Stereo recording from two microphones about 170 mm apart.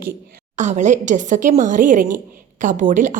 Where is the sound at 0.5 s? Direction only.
45° right (ahead or behind).